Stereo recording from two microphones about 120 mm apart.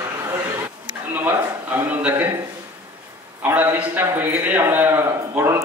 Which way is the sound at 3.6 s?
15° right (ahead or behind).